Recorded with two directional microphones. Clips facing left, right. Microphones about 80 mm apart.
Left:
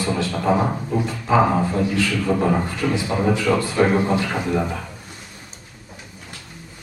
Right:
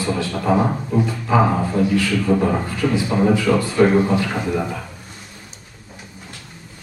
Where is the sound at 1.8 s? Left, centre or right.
Centre.